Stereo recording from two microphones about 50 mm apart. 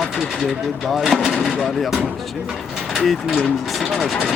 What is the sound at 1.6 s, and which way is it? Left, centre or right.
Speech, centre.